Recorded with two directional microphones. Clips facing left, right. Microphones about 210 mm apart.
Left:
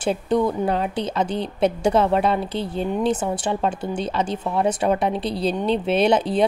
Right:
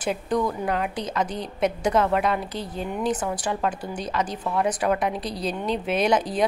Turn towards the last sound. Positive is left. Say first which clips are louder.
# left 4 dB
turn(degrees=30)  # may be behind; listen again after turning